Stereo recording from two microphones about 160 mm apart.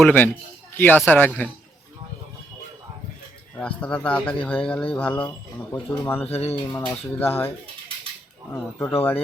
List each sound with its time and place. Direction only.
0.0 s speech: 10° left (ahead or behind)
3.6 s speech: 10° left (ahead or behind)
6.2 s speech: 40° left (ahead or behind)
6.7 s speech: 10° left (ahead or behind)
9.0 s speech: 15° left (ahead or behind)